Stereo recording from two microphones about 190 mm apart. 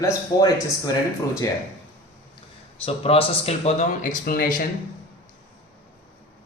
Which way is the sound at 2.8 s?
30° left (ahead or behind).